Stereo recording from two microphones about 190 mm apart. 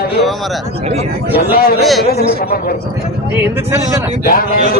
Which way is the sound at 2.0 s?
55° left (ahead or behind).